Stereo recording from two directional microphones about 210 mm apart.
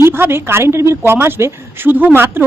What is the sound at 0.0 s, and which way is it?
A woman's voice, 10° right (ahead or behind).